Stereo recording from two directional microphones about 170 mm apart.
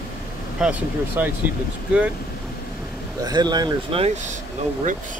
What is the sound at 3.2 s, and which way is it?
Speech, 25° right (ahead or behind).